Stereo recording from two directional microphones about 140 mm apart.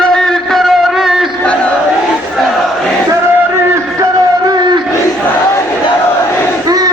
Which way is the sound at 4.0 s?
30° right (ahead or behind).